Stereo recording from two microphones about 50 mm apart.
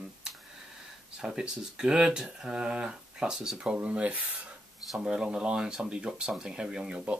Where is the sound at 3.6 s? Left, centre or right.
Right.